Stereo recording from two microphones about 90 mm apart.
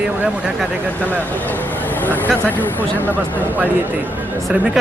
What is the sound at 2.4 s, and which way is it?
Speech, 20° left (ahead or behind).